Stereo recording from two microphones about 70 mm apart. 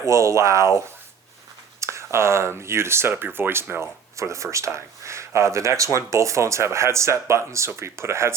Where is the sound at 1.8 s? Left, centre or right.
Right.